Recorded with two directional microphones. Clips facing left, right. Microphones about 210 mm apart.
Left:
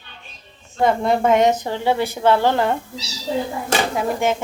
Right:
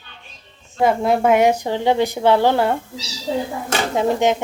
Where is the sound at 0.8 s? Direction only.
5° right (ahead or behind).